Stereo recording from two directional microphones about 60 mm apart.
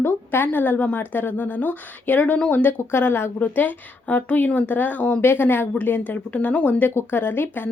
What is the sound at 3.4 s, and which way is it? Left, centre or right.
A woman's voice, left.